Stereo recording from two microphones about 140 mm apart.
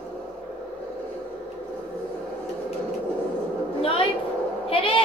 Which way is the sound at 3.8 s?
40° left (ahead or behind).